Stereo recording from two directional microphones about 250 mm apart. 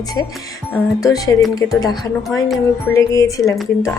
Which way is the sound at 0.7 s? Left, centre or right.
Centre.